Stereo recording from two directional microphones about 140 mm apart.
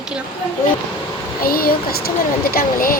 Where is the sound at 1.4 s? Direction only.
90° left.